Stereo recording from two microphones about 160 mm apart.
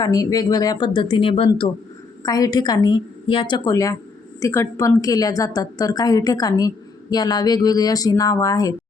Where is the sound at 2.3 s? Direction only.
25° left (ahead or behind).